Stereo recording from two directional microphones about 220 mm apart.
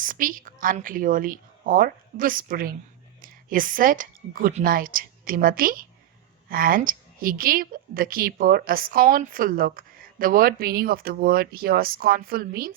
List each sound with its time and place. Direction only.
0.0 s a woman's voice: 40° right (ahead or behind)